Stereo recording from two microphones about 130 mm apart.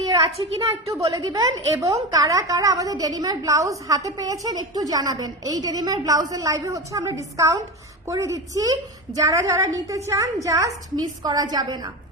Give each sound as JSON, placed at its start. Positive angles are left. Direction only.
{"t": 0.6, "sound": "a woman's voice", "side_deg": -25}